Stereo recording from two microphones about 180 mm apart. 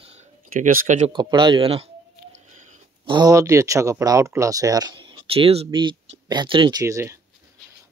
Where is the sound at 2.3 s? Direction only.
40° right (ahead or behind).